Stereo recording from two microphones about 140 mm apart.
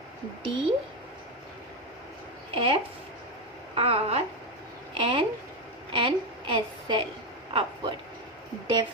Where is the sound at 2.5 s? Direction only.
35° right (ahead or behind).